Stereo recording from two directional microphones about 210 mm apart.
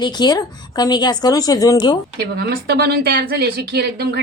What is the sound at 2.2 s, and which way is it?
Speech, 50° right (ahead or behind).